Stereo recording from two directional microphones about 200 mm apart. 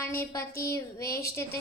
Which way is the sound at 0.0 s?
10° left (ahead or behind).